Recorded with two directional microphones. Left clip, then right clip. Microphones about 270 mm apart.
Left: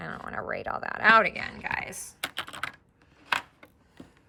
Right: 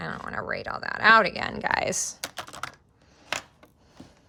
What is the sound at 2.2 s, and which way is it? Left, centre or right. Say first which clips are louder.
Typing: left 2 dB; centre.